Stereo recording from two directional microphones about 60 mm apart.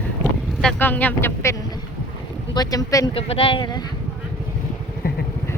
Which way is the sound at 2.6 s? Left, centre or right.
Left.